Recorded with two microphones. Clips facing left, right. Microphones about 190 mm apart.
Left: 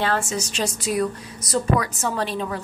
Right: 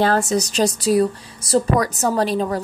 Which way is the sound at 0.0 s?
40° right (ahead or behind).